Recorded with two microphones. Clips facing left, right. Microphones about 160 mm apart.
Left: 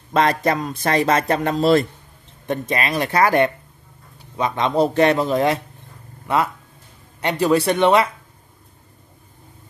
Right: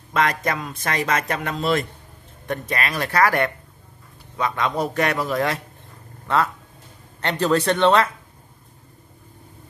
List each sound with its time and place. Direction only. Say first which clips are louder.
0.1 s speech: left 4 dB; 30° left (ahead or behind)
2.4 s a man's voice: left 3 dB; 20° left (ahead or behind)